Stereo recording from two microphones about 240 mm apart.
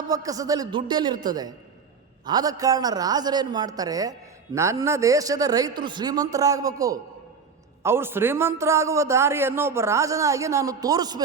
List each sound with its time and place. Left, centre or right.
0.1 s a man's voice: centre